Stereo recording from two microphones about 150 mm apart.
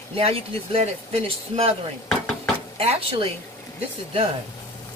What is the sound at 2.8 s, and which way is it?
Speech, 40° right (ahead or behind).